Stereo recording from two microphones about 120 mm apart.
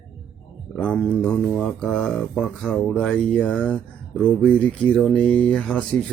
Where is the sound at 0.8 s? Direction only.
10° left (ahead or behind).